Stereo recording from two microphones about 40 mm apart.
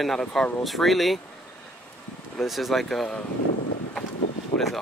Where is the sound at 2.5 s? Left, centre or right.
Centre.